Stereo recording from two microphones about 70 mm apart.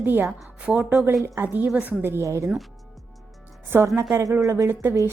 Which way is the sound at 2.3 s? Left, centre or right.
Right.